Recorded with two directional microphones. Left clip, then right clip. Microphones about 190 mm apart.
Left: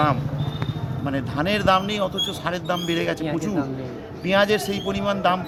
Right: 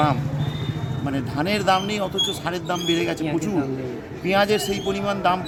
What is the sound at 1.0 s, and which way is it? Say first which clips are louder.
Speech: left 1 dB; 25° left (ahead or behind).